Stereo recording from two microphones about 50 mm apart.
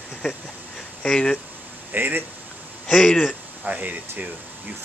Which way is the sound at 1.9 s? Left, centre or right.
Right.